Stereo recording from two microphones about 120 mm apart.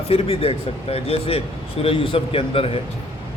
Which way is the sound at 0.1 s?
55° left (ahead or behind).